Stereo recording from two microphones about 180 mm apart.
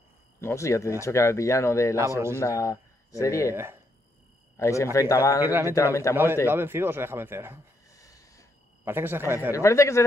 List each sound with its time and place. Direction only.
0.4 s speech: 15° left (ahead or behind)
2.0 s speech: 15° right (ahead or behind)
2.3 s speech: 15° left (ahead or behind)
3.5 s speech: 15° right (ahead or behind)
4.6 s a man's voice: 15° left (ahead or behind)
5.4 s speech: 10° right (ahead or behind)
6.1 s speech: 15° left (ahead or behind)
6.4 s speech: 10° right (ahead or behind)
7.9 s a sound: 20° left (ahead or behind)
8.8 s speech: 10° right (ahead or behind)
9.6 s speech: 15° left (ahead or behind)